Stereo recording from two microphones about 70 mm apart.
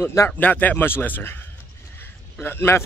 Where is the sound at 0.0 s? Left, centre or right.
Left.